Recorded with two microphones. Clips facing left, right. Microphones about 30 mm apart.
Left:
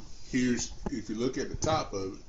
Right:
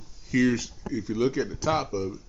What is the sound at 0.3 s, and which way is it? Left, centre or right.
Speech, right.